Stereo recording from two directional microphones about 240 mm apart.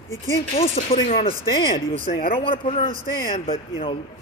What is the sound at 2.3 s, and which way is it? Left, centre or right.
Speech, left.